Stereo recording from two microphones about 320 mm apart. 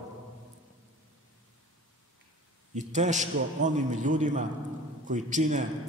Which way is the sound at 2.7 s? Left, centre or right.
Right.